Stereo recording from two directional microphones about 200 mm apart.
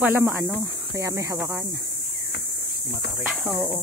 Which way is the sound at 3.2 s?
5° right (ahead or behind).